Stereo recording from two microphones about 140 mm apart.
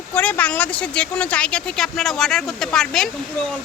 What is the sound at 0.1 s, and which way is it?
Speech, 10° left (ahead or behind).